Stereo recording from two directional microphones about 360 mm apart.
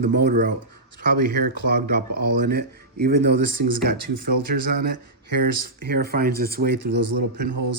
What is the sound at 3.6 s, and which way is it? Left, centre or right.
Speech, right.